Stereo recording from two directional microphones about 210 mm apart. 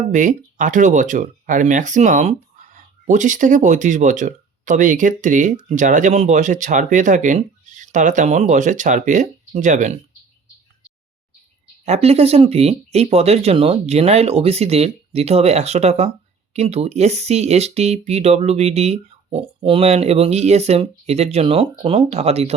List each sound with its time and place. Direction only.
0.1 s speech: 35° right (ahead or behind)
11.9 s speech: 30° right (ahead or behind)